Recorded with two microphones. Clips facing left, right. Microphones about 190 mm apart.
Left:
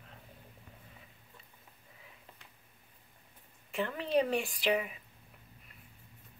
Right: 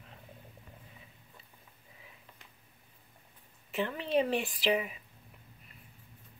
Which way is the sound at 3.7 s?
Centre (ahead or behind).